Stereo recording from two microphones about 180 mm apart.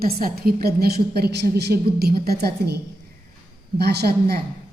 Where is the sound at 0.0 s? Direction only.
55° right (ahead or behind).